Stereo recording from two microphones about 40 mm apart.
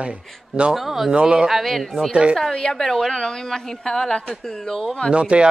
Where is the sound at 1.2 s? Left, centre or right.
Right.